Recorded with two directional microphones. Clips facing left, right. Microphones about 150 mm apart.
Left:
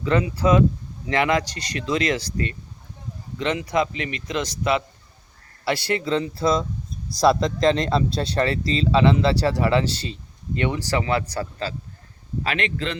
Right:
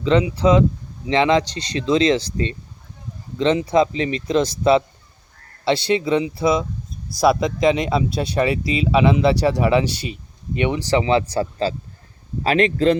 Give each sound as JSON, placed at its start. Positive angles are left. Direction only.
{"t": 0.0, "sound": "a man's voice", "side_deg": -20}
{"t": 12.4, "sound": "a man's voice", "side_deg": -35}